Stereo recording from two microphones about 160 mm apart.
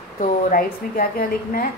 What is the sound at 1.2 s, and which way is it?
Speech, 70° left (ahead or behind).